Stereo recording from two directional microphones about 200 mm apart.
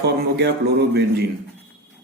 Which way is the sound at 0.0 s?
55° right (ahead or behind).